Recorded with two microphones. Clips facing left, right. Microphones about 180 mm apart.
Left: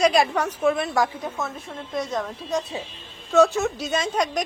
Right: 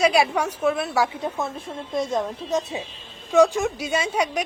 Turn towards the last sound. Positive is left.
turn(degrees=-10)  # may be behind; listen again after turning